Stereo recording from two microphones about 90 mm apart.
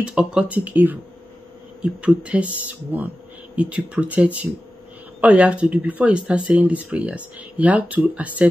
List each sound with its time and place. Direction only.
0.0 s speech: 10° right (ahead or behind)